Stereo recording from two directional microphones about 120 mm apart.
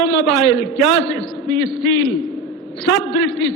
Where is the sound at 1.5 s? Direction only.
35° right (ahead or behind).